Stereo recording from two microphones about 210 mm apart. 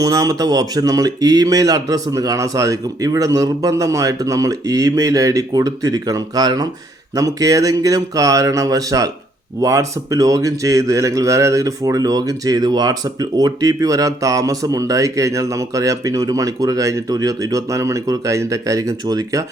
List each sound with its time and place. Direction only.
0.0 s a man's voice: 15° right (ahead or behind)